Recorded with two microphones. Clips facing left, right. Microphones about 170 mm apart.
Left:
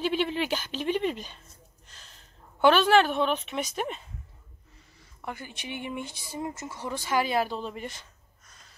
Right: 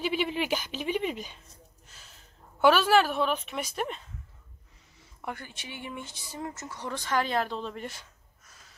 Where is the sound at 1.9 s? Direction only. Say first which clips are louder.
Left 1 dB; 10° right (ahead or behind).